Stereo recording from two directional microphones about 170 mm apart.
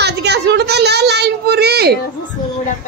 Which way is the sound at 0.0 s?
80° right.